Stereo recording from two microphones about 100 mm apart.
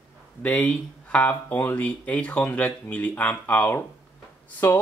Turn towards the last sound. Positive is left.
turn(degrees=20)  # may be behind; listen again after turning